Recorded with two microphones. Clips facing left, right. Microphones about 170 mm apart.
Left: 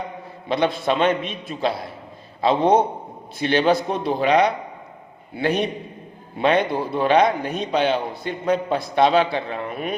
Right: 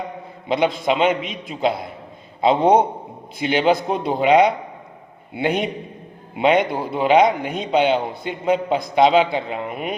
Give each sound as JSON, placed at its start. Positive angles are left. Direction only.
{"t": 0.4, "sound": "a man's voice", "side_deg": -15}